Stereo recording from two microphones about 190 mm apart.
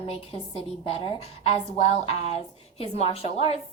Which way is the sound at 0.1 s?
30° left (ahead or behind).